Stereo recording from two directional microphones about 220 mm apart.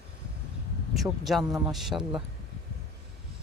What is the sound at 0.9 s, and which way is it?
Speech, centre (ahead or behind).